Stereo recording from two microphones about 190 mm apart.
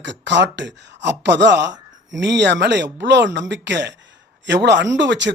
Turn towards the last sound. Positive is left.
turn(degrees=-70)  # may be behind; listen again after turning